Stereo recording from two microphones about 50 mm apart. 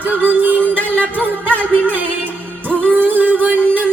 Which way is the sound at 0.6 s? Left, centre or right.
Left.